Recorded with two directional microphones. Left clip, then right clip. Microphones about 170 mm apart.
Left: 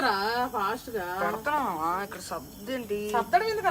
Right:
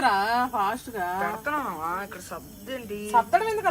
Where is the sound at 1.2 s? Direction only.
75° left (ahead or behind); by 3.0 s 90° left.